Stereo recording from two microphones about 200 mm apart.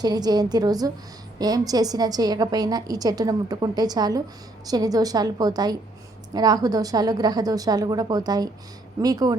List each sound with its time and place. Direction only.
0.0 s a woman's voice: 20° right (ahead or behind)